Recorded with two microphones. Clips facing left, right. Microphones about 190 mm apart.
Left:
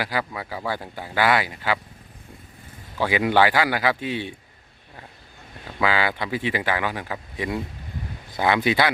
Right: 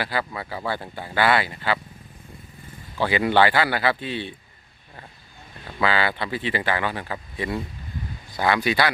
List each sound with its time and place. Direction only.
0.0 s speech: 10° left (ahead or behind)
3.0 s speech: 10° left (ahead or behind)
5.8 s speech: 10° left (ahead or behind)